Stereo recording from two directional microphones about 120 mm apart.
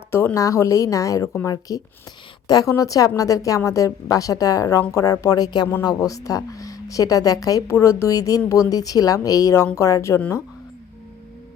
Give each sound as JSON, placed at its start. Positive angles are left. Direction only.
{"t": 0.1, "sound": "a woman's voice", "side_deg": 20}